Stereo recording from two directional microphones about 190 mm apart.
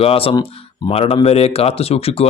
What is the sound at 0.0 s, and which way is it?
Speech, 30° left (ahead or behind).